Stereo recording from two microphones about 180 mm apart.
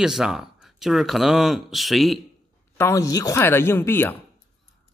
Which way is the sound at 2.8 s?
15° left (ahead or behind).